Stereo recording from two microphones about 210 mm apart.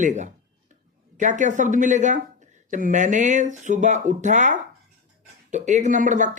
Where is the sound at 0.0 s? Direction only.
35° right (ahead or behind).